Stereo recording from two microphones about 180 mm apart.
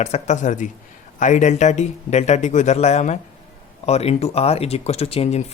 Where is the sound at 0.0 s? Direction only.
40° left (ahead or behind).